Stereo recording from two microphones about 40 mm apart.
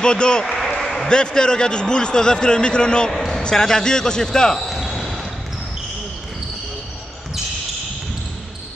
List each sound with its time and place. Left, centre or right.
0.0 s a man's voice: left
0.6 s a sound: centre
1.0 s a man's voice: left
4.6 s basketball bounce: centre